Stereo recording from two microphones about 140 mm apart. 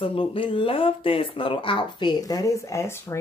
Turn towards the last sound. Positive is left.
turn(degrees=20)  # may be behind; listen again after turning